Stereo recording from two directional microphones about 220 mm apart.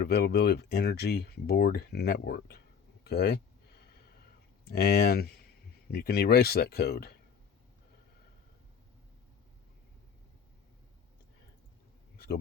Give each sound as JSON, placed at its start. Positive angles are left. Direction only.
{"t": 0.0, "sound": "speech", "side_deg": 45}
{"t": 4.6, "sound": "speech", "side_deg": 45}
{"t": 12.1, "sound": "a sound", "side_deg": 45}